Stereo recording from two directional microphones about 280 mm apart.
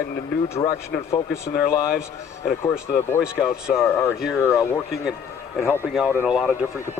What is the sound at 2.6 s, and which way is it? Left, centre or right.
Speech, centre.